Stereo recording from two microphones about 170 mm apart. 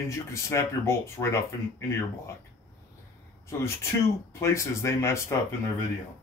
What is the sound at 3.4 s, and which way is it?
Speech, 15° left (ahead or behind).